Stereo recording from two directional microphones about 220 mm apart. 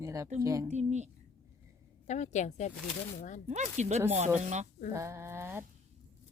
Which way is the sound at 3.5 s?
30° right (ahead or behind).